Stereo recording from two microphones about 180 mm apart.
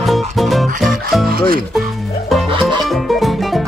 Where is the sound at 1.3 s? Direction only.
55° right (ahead or behind).